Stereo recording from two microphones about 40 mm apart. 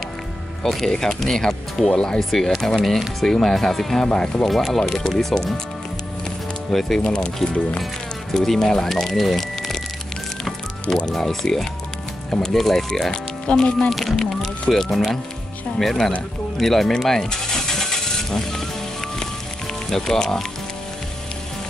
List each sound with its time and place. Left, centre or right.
0.7 s speech: centre
2.1 s speech: centre
6.7 s speech: centre
7.0 s speech: centre
8.3 s speech: centre
11.0 s speech: centre
12.3 s speech: centre
13.5 s speech: left
13.8 s speech: centre
16.5 s vehicle: centre
19.9 s speech: centre